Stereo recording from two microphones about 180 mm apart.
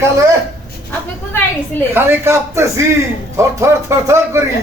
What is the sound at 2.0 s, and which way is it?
Speech, 10° right (ahead or behind).